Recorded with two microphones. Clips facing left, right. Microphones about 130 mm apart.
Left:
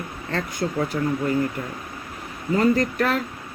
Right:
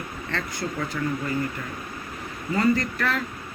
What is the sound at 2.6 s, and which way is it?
Speech, 45° left (ahead or behind).